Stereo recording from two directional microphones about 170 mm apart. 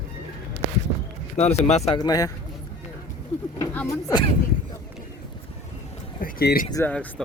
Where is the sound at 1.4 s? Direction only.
40° left (ahead or behind).